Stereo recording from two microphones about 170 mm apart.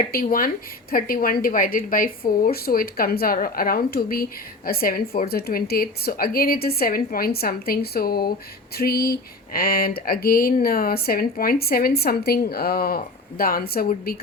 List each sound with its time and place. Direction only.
0.1 s speech: 60° left (ahead or behind)